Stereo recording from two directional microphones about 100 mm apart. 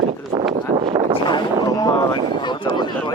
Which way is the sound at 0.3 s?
55° right (ahead or behind).